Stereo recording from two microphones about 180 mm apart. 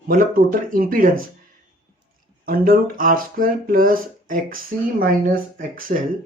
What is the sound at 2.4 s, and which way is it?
Speech, 50° right (ahead or behind).